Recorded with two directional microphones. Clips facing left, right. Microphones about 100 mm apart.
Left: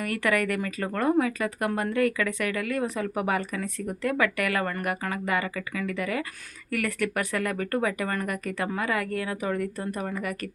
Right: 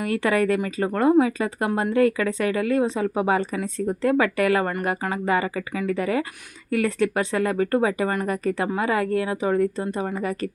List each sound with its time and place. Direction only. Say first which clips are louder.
0.0 s speech: right 4 dB; 25° right (ahead or behind)